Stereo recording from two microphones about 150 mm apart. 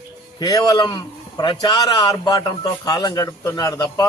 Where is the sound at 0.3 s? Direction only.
25° left (ahead or behind).